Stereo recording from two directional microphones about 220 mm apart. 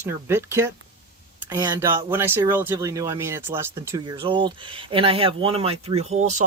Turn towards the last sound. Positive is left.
turn(degrees=-30)  # may be behind; listen again after turning